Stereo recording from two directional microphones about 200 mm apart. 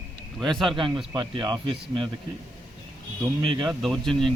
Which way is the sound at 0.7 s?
25° right (ahead or behind).